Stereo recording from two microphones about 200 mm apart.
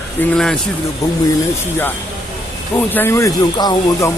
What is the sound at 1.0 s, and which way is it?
Speech, 15° left (ahead or behind).